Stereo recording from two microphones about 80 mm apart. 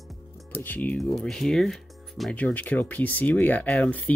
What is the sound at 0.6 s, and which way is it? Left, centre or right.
Speech, left.